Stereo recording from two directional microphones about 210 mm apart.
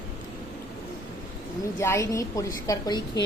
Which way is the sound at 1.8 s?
15° left (ahead or behind).